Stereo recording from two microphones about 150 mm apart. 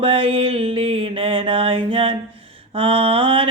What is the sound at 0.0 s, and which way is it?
Mantra, 35° right (ahead or behind).